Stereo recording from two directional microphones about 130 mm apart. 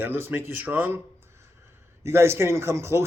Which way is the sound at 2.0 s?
20° right (ahead or behind).